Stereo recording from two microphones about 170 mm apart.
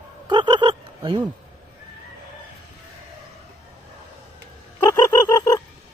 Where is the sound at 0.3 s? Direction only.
25° right (ahead or behind).